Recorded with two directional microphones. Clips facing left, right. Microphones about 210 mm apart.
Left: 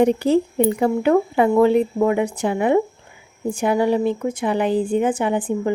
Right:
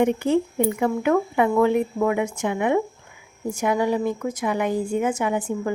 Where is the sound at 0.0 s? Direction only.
35° left (ahead or behind).